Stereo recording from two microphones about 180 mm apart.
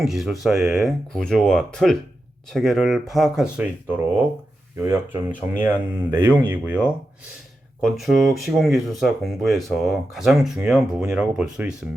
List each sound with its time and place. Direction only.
0.0 s speech: centre (ahead or behind)
6.0 s speech: 25° right (ahead or behind)
6.5 s speech: 5° right (ahead or behind)